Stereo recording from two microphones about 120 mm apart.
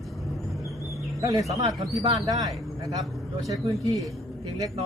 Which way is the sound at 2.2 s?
30° right (ahead or behind).